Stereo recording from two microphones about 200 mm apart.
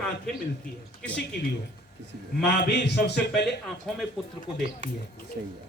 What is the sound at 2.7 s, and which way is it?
Speech, 55° left (ahead or behind).